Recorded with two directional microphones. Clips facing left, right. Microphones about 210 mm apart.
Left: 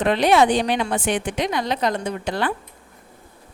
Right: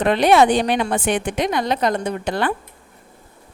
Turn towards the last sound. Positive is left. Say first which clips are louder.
# right 2 dB
turn(degrees=-55)  # may be behind; listen again after turning